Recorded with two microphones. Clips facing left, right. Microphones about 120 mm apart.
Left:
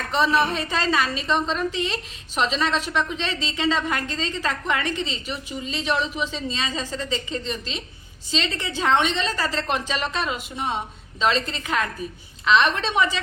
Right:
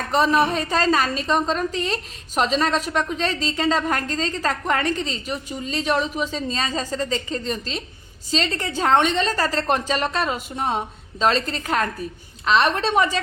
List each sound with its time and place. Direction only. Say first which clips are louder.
0.1 s a woman's voice: right 2 dB; 40° right (ahead or behind)